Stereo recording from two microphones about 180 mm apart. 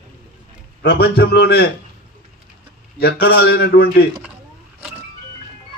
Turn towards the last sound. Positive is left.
turn(degrees=60)  # may be behind; listen again after turning